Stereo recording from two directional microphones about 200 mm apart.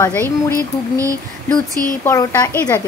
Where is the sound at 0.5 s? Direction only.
15° right (ahead or behind).